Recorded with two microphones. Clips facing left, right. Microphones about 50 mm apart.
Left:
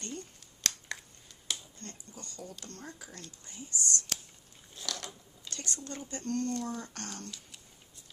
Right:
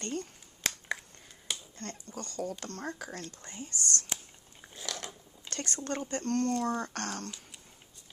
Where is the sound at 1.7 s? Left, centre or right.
Right.